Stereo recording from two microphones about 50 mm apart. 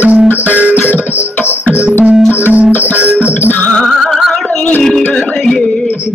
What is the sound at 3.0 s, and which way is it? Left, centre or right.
Music, right.